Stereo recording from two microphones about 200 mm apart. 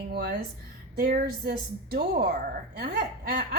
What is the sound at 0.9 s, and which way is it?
A woman's voice, 50° right (ahead or behind).